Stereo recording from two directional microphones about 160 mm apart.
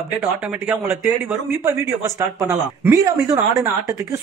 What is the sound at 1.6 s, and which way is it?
Speech, 20° right (ahead or behind).